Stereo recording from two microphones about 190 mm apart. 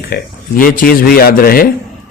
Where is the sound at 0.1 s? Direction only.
45° left (ahead or behind).